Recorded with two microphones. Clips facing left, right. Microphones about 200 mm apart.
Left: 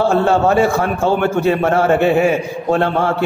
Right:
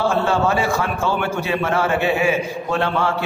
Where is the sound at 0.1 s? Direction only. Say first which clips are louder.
Left 5 dB; 55° left (ahead or behind).